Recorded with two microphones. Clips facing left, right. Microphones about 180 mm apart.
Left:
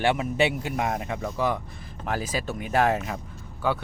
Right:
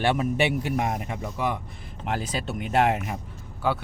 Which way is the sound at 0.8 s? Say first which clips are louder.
Even; 20° right (ahead or behind).